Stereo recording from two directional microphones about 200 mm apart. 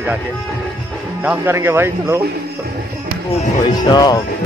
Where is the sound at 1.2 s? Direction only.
10° right (ahead or behind).